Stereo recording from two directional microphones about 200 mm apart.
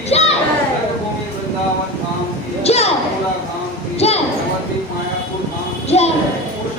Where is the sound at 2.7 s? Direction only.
30° left (ahead or behind).